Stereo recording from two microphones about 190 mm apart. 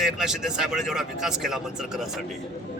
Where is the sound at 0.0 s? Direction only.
Centre (ahead or behind).